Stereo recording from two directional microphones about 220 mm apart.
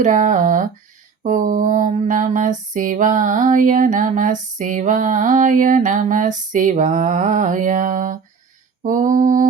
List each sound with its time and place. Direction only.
0.0 s mantra: 35° right (ahead or behind)